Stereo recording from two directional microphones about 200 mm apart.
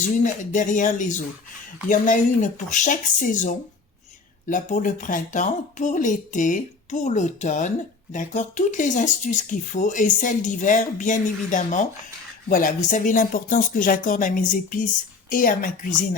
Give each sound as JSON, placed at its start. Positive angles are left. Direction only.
{"t": 0.2, "sound": "a woman's voice", "side_deg": 40}